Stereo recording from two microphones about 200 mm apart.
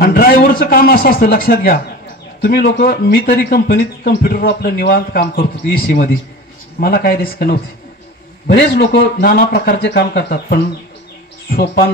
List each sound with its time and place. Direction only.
0.0 s a man's voice: 45° left (ahead or behind)